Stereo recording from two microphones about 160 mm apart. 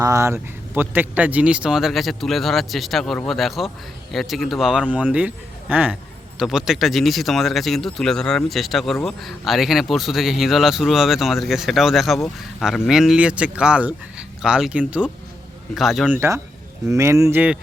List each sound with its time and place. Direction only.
0.0 s a man's voice: 20° right (ahead or behind); by 16.1 s centre (ahead or behind)
16.1 s speech: 15° right (ahead or behind)